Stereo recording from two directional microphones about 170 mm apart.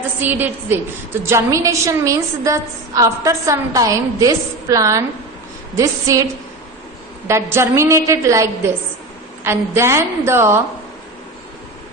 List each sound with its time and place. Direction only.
0.2 s a woman's voice: 10° right (ahead or behind)
7.3 s a woman's voice: 15° right (ahead or behind)